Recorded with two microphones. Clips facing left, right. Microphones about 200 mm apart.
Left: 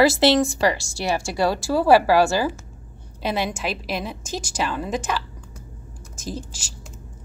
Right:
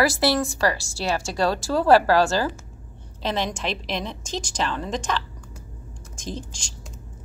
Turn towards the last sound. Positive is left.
turn(degrees=5)  # may be behind; listen again after turning